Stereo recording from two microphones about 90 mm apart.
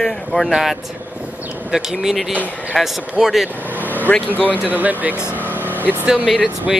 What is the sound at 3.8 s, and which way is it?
Vehicle, 20° left (ahead or behind).